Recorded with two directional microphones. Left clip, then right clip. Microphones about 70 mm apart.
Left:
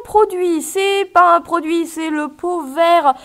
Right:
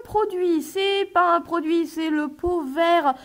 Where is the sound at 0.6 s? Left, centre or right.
Centre.